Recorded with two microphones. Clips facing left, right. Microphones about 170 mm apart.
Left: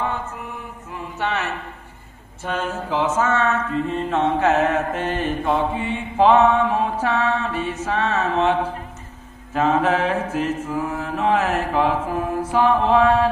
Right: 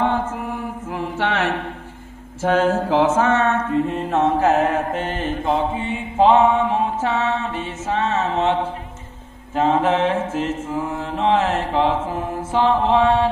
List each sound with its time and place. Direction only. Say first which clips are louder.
0.0 s mantra: right 6 dB; 90° right
3.1 s mantra: right 3 dB; 35° right (ahead or behind)
9.6 s mantra: right 1 dB; 25° right (ahead or behind)